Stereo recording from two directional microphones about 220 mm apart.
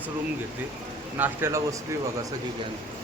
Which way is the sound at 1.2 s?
10° right (ahead or behind).